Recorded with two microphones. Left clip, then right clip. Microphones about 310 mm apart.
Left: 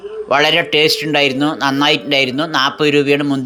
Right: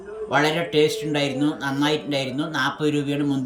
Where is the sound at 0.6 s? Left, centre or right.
Left.